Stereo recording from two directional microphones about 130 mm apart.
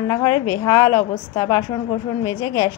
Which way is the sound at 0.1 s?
20° left (ahead or behind).